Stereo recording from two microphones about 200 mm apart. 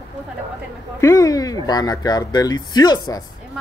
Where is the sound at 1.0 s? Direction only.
15° left (ahead or behind).